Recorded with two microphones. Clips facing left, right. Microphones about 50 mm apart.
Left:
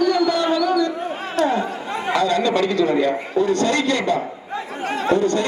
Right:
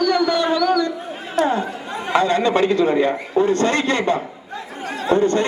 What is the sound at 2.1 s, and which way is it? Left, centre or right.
A man's voice, right.